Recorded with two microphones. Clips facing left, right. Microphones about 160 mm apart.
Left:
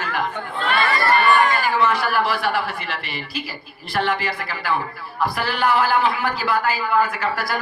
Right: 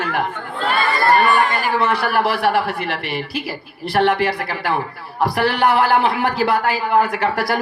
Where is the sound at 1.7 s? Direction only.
65° right (ahead or behind).